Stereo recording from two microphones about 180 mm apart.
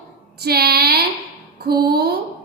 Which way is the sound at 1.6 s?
60° right (ahead or behind).